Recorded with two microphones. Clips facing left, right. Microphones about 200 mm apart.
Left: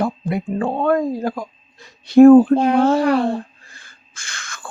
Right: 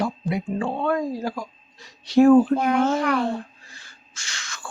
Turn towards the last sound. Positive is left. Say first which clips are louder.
# left 2 dB
turn(degrees=55)  # may be behind; listen again after turning